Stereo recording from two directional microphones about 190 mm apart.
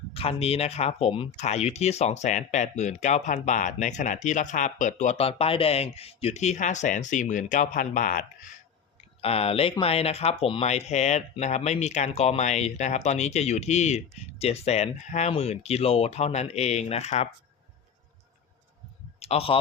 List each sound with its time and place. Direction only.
0.1 s speech: 30° left (ahead or behind)
9.2 s speech: 30° left (ahead or behind)
19.2 s speech: 30° left (ahead or behind)